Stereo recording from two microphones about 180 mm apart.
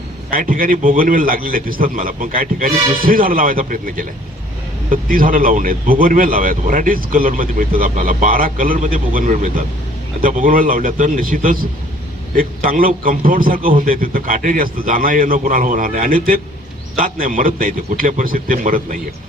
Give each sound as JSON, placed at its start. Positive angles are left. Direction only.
{"t": 0.3, "sound": "speech", "side_deg": -50}